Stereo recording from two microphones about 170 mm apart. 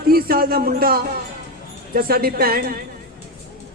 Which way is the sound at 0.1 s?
60° right (ahead or behind).